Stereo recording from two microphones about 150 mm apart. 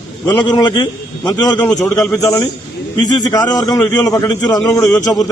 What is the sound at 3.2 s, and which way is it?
A man's voice, 25° left (ahead or behind).